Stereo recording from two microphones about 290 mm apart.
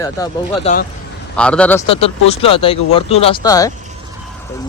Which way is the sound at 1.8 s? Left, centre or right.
Left.